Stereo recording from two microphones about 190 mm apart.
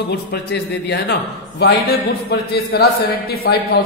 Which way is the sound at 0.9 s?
60° left (ahead or behind).